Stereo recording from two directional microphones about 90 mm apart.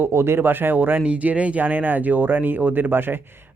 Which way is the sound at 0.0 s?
30° right (ahead or behind).